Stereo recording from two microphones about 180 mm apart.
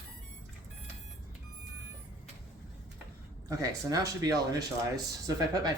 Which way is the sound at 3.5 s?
20° right (ahead or behind).